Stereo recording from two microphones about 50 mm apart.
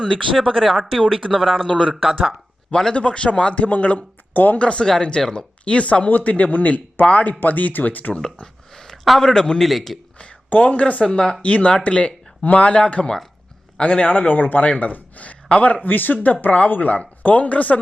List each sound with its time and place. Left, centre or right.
0.3 s speech: centre
2.6 s a man's voice: centre
2.9 s speech: left
4.6 s speech: centre; by 8.1 s left
8.7 s a sound: centre
9.2 s a man's voice: centre
10.2 s speech: left
11.0 s a man's voice: centre